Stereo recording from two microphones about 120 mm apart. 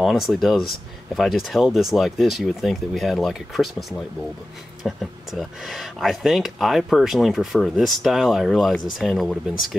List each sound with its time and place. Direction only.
0.0 s speech: centre (ahead or behind)